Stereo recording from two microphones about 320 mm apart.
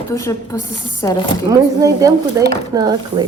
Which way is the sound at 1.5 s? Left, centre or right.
Centre.